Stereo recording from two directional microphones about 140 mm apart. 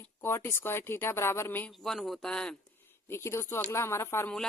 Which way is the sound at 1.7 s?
Centre (ahead or behind).